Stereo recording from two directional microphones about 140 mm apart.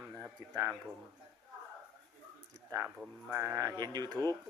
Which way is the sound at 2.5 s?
20° right (ahead or behind).